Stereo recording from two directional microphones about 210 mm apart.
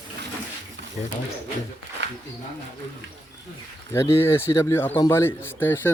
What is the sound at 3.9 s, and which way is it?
Speech, 10° left (ahead or behind).